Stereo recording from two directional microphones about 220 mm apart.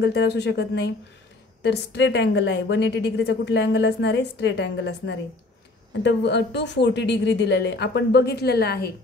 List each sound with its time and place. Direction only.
0.0 s a woman's voice: 50° left (ahead or behind)